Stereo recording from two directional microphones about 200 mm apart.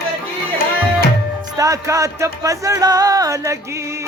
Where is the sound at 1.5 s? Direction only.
15° right (ahead or behind).